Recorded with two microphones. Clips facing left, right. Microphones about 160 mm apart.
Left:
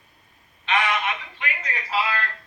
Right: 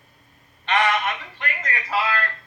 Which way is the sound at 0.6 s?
45° right (ahead or behind).